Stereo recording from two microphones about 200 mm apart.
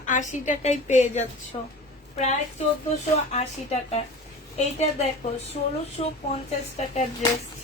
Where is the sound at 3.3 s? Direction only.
30° left (ahead or behind).